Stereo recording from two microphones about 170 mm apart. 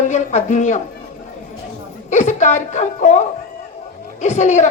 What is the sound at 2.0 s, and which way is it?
Speech, 45° left (ahead or behind).